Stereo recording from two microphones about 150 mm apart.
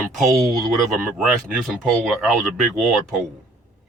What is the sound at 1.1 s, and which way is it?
Speech, centre (ahead or behind).